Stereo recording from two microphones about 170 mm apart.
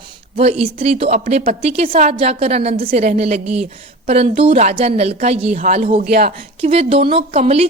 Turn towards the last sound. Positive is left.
turn(degrees=-35)  # may be behind; listen again after turning